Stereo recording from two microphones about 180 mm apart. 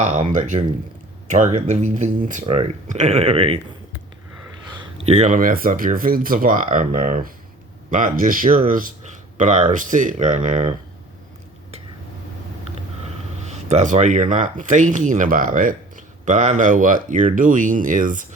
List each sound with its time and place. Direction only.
0.0 s speech: 40° right (ahead or behind)
4.8 s speech: 35° right (ahead or behind)
13.5 s speech: 40° right (ahead or behind)